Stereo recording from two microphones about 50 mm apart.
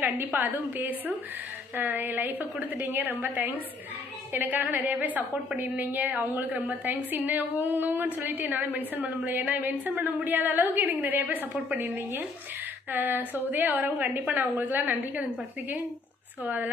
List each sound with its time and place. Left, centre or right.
0.4 s a woman's voice: right
11.8 s a woman's voice: right
12.9 s a woman's voice: right
16.4 s a woman's voice: right